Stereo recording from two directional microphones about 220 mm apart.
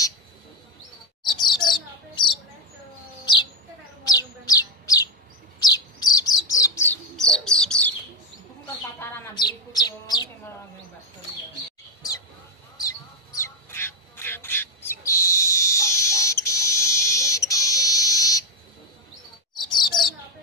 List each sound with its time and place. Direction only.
1.3 s bird: 20° left (ahead or behind)
4.0 s chirp: 15° left (ahead or behind)
5.6 s bird: 20° left (ahead or behind)
6.9 s bird: 5° left (ahead or behind)
9.0 s bird: 10° left (ahead or behind)
12.7 s bird: 15° left (ahead or behind)
15.3 s a sound: 15° left (ahead or behind)
16.4 s fire alarm: 15° left (ahead or behind)
19.5 s chirp: 20° left (ahead or behind)